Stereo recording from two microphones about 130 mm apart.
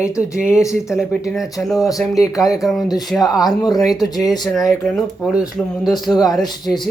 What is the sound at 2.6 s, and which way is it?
Speech, centre (ahead or behind).